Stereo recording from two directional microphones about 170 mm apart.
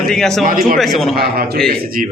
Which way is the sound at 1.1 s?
65° right (ahead or behind).